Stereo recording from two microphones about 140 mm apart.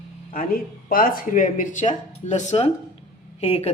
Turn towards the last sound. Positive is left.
turn(degrees=45)  # may be behind; listen again after turning